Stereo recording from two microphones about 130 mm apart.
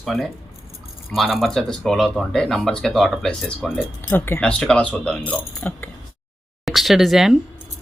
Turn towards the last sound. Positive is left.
turn(degrees=0)  # may be behind; listen again after turning